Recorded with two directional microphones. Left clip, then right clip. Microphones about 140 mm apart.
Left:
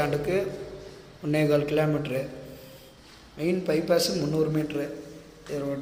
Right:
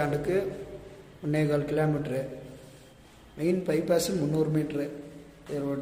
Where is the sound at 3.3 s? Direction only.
30° right (ahead or behind).